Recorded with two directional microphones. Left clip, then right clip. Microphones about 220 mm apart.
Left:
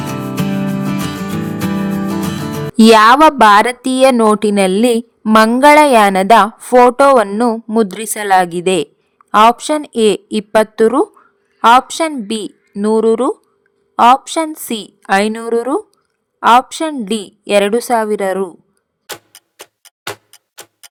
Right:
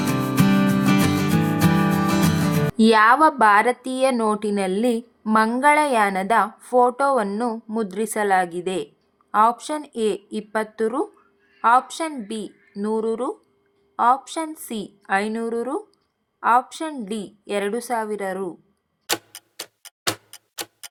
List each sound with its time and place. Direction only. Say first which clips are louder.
0.0 s music: left 1 dB; centre (ahead or behind)
2.7 s a woman's voice: left 9 dB; 45° left (ahead or behind)
19.0 s clock: right 4 dB; centre (ahead or behind)